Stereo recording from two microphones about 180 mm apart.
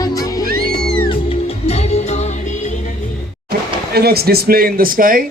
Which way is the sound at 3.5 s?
60° right (ahead or behind).